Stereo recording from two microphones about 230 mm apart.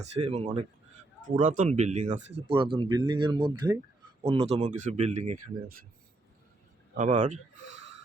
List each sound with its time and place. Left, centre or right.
0.0 s speech: right
6.9 s speech: right